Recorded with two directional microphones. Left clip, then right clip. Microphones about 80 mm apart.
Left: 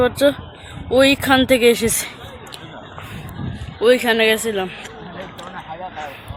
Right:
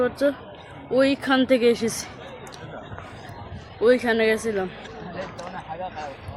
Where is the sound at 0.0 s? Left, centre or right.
Left.